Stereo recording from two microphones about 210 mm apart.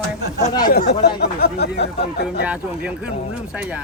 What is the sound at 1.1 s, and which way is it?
Speech, 50° left (ahead or behind).